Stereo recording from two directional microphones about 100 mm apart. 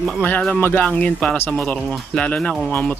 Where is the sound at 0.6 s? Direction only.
20° left (ahead or behind).